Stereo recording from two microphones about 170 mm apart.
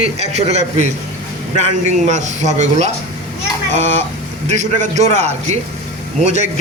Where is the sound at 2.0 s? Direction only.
45° right (ahead or behind).